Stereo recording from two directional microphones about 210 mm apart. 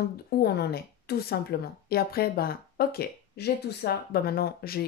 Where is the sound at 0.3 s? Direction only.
50° left (ahead or behind).